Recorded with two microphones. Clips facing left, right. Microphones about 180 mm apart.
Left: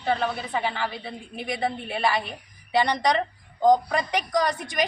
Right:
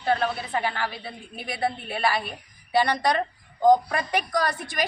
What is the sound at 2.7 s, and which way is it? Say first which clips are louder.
Speech: even; 15° left (ahead or behind).